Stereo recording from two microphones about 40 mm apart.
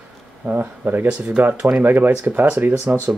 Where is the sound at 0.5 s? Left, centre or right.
Right.